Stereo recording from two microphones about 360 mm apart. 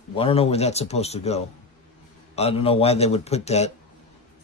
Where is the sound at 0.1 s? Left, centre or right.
Centre.